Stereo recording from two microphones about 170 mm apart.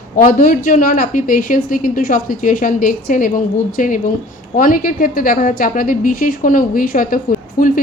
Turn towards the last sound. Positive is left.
turn(degrees=55)  # may be behind; listen again after turning